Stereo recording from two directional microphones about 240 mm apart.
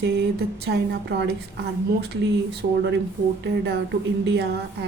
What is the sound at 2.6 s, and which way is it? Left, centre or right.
Speech, right.